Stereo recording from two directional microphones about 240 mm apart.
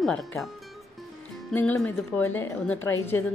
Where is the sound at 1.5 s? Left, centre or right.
Centre.